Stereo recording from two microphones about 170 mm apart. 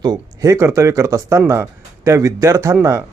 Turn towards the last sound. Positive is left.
turn(degrees=-15)  # may be behind; listen again after turning